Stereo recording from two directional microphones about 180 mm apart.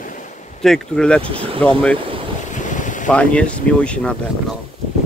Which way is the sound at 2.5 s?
45° left (ahead or behind).